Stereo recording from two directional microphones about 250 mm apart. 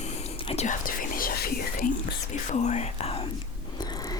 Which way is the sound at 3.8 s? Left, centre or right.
Centre.